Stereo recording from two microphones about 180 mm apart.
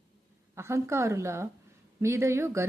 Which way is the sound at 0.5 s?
15° right (ahead or behind).